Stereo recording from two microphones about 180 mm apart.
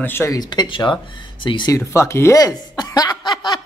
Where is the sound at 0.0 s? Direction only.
15° left (ahead or behind).